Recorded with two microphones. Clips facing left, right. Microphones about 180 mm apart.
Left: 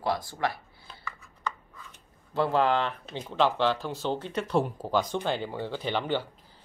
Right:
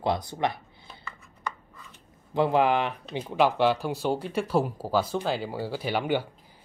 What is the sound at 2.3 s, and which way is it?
Speech, 15° right (ahead or behind).